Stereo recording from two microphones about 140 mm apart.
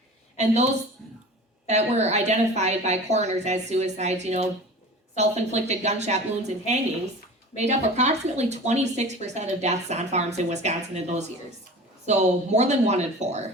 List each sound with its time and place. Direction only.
0.3 s a woman's voice: 55° right (ahead or behind)
7.5 s speech: 55° right (ahead or behind)